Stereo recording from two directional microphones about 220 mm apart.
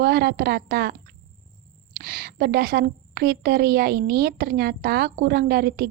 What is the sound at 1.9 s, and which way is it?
A woman's voice, 45° right (ahead or behind).